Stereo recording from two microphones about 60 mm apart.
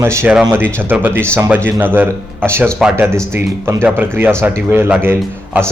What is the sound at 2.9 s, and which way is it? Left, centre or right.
Speech, right.